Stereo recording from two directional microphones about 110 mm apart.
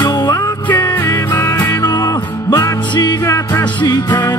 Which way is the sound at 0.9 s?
20° left (ahead or behind).